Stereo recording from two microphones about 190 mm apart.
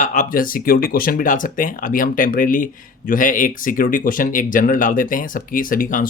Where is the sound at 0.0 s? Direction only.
45° left (ahead or behind).